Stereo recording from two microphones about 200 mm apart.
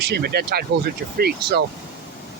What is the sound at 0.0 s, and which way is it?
Speech, 55° right (ahead or behind).